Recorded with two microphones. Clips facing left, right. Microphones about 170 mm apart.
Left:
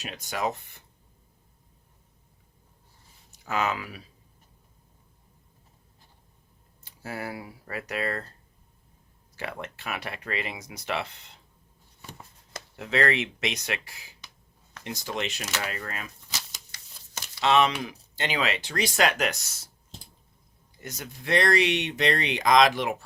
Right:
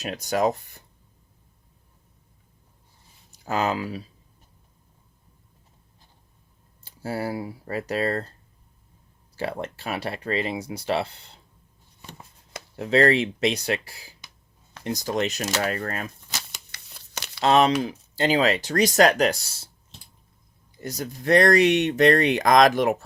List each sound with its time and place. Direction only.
0.0 s speech: 40° right (ahead or behind)
3.3 s speech: 35° right (ahead or behind)
6.8 s speech: 30° right (ahead or behind)
9.3 s speech: 35° right (ahead or behind)
12.7 s speech: 35° right (ahead or behind)
16.5 s crumpling: 70° right (ahead or behind)
17.4 s speech: 40° right (ahead or behind)
20.8 s speech: 35° right (ahead or behind)